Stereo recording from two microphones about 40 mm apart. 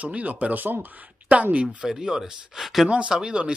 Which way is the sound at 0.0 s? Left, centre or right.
Right.